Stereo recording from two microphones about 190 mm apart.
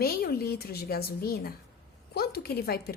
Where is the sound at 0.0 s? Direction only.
55° left (ahead or behind).